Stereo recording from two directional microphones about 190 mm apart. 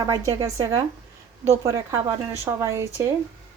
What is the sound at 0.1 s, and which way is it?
A woman's voice, 15° right (ahead or behind).